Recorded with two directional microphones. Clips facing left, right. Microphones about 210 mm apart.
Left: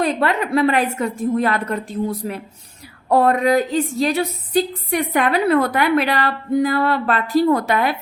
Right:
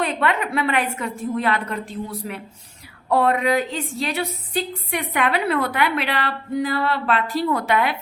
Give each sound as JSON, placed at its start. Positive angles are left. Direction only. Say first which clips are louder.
{"t": 0.0, "sound": "a woman's voice", "louder": "left 3 dB", "side_deg": 40}